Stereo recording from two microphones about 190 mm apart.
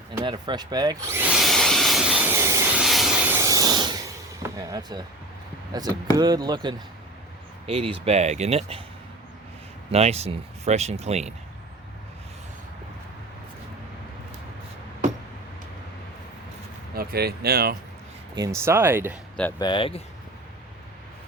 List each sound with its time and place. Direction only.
0.2 s tools: 20° right (ahead or behind)
2.8 s rub: centre (ahead or behind); by 4.1 s 20° right (ahead or behind)
4.5 s speech: 20° right (ahead or behind)
9.9 s speech: 35° right (ahead or behind)
16.9 s speech: 50° right (ahead or behind)
18.3 s speech: 15° right (ahead or behind)
19.5 s speech: 25° left (ahead or behind)